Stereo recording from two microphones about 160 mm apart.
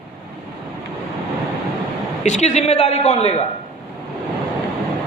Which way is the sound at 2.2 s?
45° left (ahead or behind).